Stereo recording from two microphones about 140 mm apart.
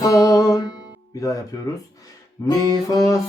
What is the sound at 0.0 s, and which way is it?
Music, 25° left (ahead or behind).